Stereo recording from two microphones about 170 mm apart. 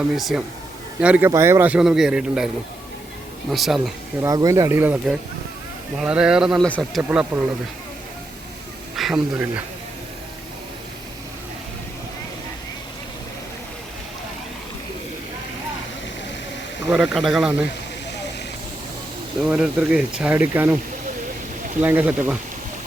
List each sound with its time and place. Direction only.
0.2 s speech: centre (ahead or behind)
3.5 s speech: centre (ahead or behind)
4.2 s speech: 20° right (ahead or behind); by 6.7 s 5° right (ahead or behind)
6.7 s speech: 5° left (ahead or behind)
7.1 s speech: 5° right (ahead or behind)
9.0 s speech: centre (ahead or behind)
16.9 s speech: 5° right (ahead or behind)
19.4 s speech: 5° right (ahead or behind)
21.8 s speech: 10° right (ahead or behind)